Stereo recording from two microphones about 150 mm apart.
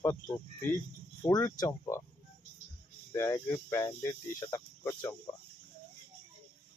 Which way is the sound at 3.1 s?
20° left (ahead or behind).